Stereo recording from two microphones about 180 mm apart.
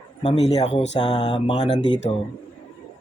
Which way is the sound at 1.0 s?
25° left (ahead or behind).